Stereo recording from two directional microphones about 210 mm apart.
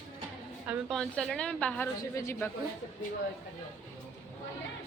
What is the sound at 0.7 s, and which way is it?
A woman's voice, centre (ahead or behind).